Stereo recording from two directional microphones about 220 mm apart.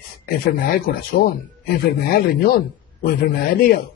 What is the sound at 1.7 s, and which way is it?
Speech, 40° left (ahead or behind).